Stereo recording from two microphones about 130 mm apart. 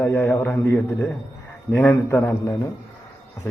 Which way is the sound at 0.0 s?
15° left (ahead or behind).